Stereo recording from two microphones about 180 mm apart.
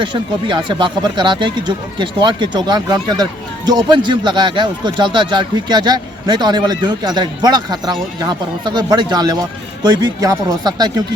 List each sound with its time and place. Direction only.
0.0 s speech: 25° right (ahead or behind)